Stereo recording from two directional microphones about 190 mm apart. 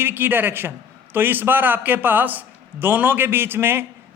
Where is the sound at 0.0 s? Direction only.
10° right (ahead or behind).